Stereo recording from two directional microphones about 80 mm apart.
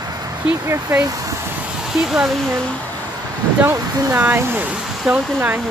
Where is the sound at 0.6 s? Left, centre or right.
Right.